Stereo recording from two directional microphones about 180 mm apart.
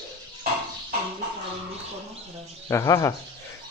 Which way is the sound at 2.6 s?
20° left (ahead or behind).